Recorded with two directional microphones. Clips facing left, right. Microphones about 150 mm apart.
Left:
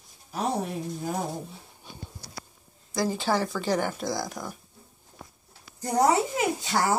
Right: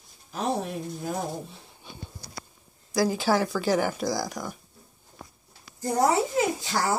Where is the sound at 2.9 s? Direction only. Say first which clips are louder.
Right 3 dB; 5° right (ahead or behind).